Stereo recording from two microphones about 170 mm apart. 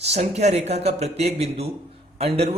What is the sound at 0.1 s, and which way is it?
Speech, 40° right (ahead or behind).